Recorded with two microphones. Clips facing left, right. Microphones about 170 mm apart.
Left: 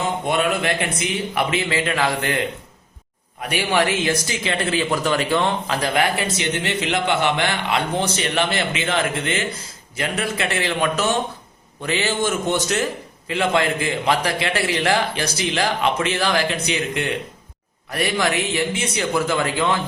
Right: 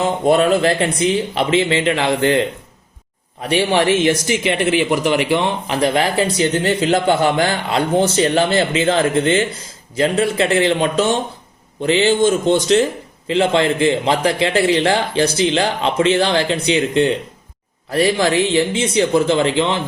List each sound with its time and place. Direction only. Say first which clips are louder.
0.3 s a man's voice: right 9 dB; 35° right (ahead or behind)
3.5 s a man's voice: right 5 dB; 25° right (ahead or behind)